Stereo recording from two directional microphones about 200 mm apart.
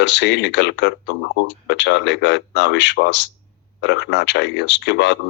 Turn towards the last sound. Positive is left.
turn(degrees=60)  # may be behind; listen again after turning